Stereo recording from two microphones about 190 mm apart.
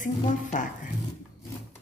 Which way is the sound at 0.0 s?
40° left (ahead or behind).